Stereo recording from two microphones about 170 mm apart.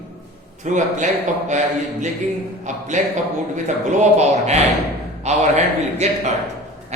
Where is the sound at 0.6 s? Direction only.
45° right (ahead or behind).